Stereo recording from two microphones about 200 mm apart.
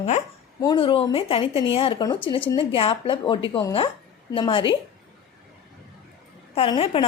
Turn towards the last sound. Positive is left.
turn(degrees=30)  # may be behind; listen again after turning